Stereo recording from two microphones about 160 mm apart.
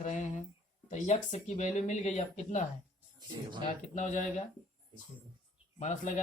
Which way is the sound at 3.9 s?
50° left (ahead or behind).